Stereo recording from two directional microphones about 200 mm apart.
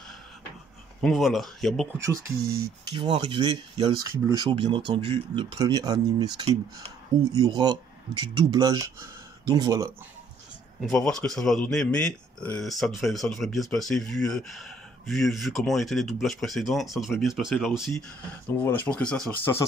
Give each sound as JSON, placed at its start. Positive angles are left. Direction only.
{"t": 1.0, "sound": "speech", "side_deg": 0}
{"t": 2.0, "sound": "speech", "side_deg": -15}
{"t": 10.8, "sound": "speech", "side_deg": 5}